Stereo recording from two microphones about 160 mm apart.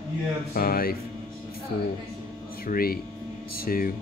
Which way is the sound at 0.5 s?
65° left (ahead or behind).